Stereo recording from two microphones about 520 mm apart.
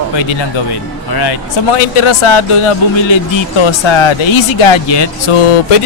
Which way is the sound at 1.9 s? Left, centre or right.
Left.